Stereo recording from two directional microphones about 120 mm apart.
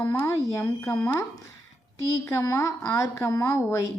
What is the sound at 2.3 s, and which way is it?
A woman's voice, 25° left (ahead or behind).